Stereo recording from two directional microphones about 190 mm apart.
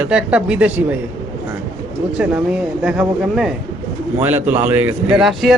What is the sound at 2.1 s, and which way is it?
Speech, 5° right (ahead or behind).